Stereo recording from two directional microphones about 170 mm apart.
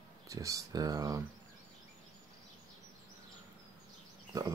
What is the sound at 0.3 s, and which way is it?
Speech, 20° right (ahead or behind).